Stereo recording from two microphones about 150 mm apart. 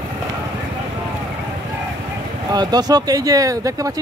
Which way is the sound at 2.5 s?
25° right (ahead or behind).